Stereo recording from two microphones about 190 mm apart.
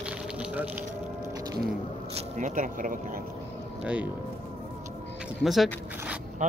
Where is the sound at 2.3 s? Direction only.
40° right (ahead or behind).